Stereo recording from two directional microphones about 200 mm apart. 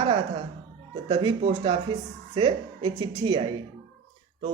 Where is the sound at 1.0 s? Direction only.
25° right (ahead or behind).